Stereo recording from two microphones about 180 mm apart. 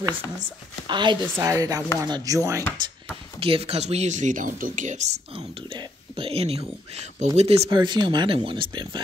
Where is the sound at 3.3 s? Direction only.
30° right (ahead or behind).